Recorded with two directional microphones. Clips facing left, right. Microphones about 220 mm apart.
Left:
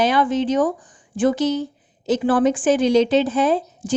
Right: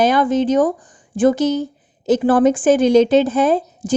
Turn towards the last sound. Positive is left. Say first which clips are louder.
# right 3 dB
turn(degrees=-45)  # may be behind; listen again after turning